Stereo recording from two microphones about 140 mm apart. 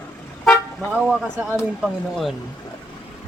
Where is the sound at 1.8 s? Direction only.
Centre (ahead or behind).